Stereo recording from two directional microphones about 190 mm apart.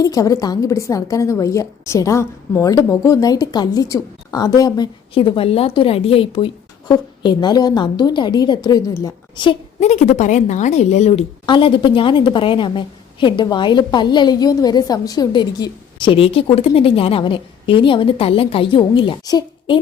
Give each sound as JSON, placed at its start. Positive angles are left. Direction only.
{"t": 0.0, "sound": "a woman's voice", "side_deg": 20}